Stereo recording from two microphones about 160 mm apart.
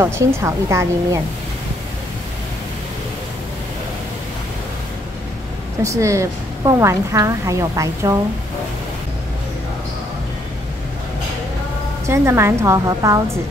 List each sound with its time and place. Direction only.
0.0 s a woman's voice: 20° right (ahead or behind)
5.8 s a woman's voice: 20° right (ahead or behind)
12.1 s a woman's voice: 15° right (ahead or behind)